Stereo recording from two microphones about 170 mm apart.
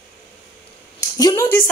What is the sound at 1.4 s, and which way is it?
Speech, 10° left (ahead or behind).